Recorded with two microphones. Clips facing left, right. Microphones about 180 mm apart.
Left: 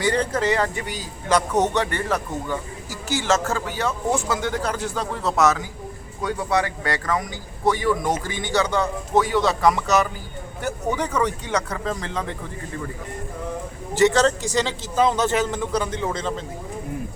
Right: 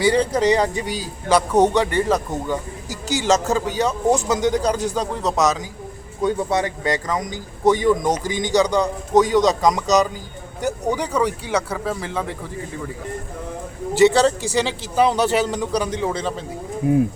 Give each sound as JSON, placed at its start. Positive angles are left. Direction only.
{"t": 0.0, "sound": "a man's voice", "side_deg": -10}
{"t": 13.9, "sound": "a man's voice", "side_deg": -15}